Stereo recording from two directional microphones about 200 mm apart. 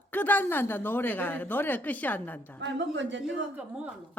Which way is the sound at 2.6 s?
65° right (ahead or behind).